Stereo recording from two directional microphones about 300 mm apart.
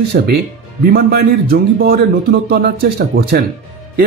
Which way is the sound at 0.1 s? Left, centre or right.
Right.